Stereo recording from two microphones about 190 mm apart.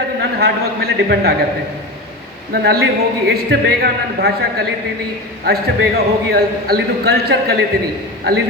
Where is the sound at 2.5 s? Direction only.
55° right (ahead or behind).